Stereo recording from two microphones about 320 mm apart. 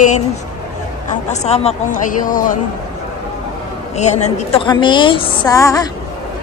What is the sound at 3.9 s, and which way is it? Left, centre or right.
A woman's voice, left.